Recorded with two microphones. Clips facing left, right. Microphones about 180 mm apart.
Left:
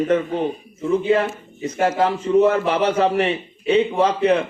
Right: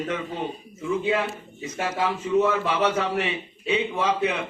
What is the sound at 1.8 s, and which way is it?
A man's voice, 60° left (ahead or behind).